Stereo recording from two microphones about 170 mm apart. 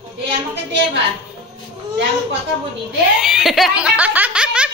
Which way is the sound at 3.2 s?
Centre (ahead or behind).